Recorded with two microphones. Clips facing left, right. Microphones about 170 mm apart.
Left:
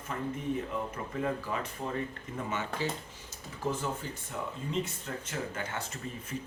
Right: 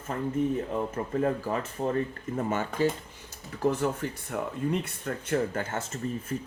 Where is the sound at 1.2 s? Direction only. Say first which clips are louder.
Right 4 dB; 40° right (ahead or behind).